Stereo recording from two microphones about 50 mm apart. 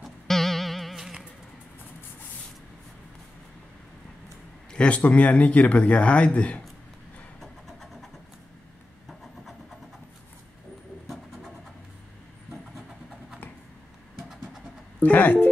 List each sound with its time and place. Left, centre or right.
0.0 s music: centre
4.7 s speech: left
7.3 s vehicle: centre
15.0 s speech: left